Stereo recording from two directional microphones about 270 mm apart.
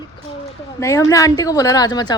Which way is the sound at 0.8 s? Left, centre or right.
Centre.